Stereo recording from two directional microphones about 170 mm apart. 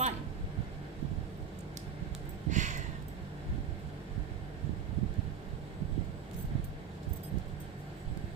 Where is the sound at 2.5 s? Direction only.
45° right (ahead or behind).